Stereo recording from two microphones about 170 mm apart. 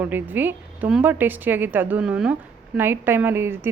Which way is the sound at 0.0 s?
10° right (ahead or behind).